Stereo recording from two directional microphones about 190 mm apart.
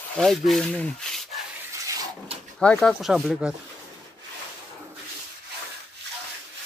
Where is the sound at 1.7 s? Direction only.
15° right (ahead or behind).